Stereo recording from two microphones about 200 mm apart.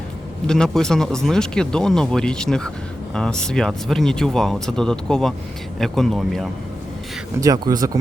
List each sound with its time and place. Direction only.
0.4 s speech: 5° left (ahead or behind)
7.4 s speech: 20° right (ahead or behind)